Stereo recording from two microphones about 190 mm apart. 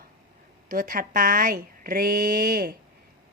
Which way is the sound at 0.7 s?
45° right (ahead or behind).